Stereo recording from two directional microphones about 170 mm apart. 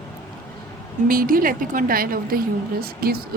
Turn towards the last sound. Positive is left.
turn(degrees=-60)  # may be behind; listen again after turning